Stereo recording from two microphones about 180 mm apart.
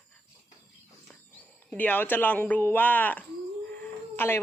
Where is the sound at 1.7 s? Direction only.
10° left (ahead or behind).